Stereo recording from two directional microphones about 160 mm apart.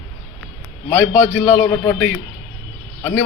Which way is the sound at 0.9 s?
15° left (ahead or behind).